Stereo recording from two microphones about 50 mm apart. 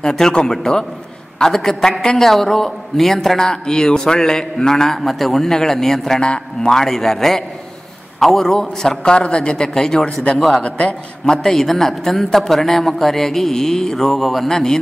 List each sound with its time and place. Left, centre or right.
0.0 s a man's voice: centre
6.2 s a man's voice: centre
6.7 s a man's voice: centre
10.6 s a man's voice: left
11.2 s a man's voice: centre